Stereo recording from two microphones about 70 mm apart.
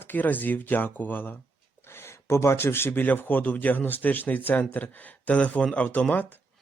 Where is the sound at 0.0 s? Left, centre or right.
Left.